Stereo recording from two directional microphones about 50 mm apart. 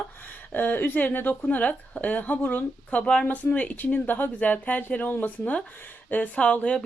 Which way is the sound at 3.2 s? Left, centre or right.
Left.